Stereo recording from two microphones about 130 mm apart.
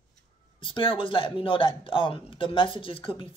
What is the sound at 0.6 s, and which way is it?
Speech, 45° left (ahead or behind).